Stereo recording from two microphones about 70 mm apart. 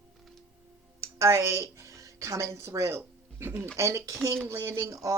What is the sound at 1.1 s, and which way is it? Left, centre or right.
A woman's voice, right.